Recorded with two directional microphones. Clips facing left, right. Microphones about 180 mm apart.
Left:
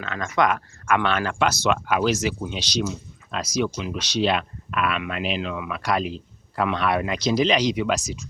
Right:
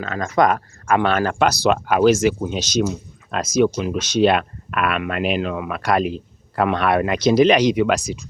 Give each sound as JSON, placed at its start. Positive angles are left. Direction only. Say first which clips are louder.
{"t": 0.0, "sound": "speech", "louder": "right 5 dB", "side_deg": -40}